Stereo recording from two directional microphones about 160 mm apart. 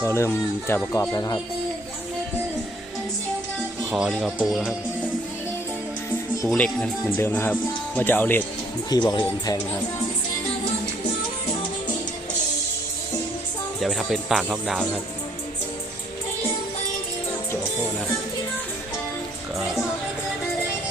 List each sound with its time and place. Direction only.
0.0 s speech: 15° left (ahead or behind)
3.9 s speech: centre (ahead or behind)
6.5 s speech: 5° left (ahead or behind)
8.9 s speech: 25° left (ahead or behind)
13.7 s speech: centre (ahead or behind)